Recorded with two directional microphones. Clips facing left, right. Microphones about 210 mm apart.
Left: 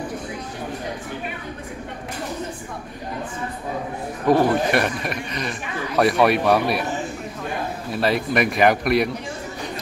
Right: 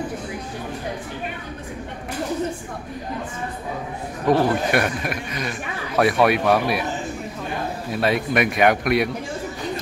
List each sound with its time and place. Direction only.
4.3 s a man's voice: centre (ahead or behind)
7.9 s a man's voice: centre (ahead or behind)